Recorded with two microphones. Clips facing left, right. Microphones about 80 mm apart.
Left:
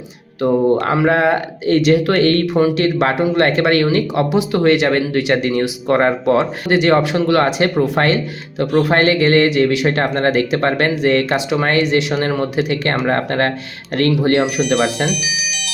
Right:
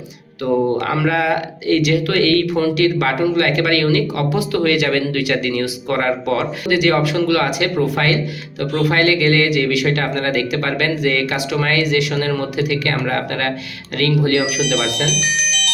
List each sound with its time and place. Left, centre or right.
0.4 s speech: left
15.0 s music: right